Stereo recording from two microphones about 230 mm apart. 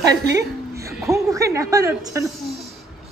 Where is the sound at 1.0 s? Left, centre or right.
Centre.